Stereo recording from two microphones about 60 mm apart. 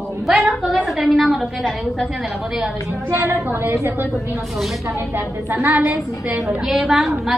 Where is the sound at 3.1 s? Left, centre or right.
Right.